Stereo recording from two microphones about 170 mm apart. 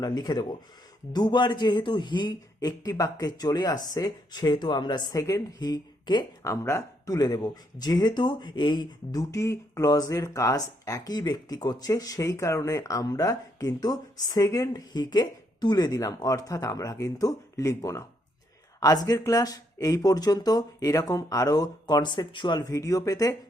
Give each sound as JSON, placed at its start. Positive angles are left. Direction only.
{"t": 0.0, "sound": "a man's voice", "side_deg": 20}